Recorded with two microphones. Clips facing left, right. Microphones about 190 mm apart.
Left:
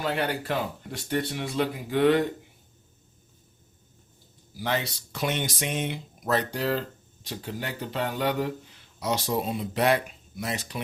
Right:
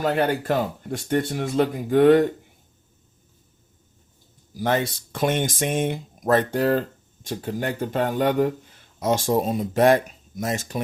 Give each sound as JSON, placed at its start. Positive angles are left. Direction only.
{"t": 0.0, "sound": "speech", "side_deg": -45}
{"t": 4.5, "sound": "speech", "side_deg": -50}